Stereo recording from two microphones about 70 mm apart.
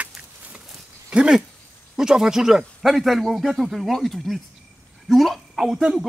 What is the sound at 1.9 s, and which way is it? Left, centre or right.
Speech, centre.